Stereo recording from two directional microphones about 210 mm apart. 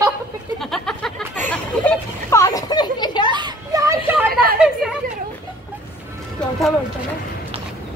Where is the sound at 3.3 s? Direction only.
20° right (ahead or behind).